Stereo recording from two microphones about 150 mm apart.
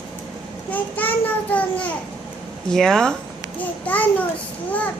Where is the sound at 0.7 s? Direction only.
10° left (ahead or behind).